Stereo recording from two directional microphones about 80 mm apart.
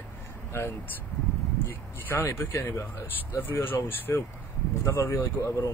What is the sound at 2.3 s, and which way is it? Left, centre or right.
Speech, left.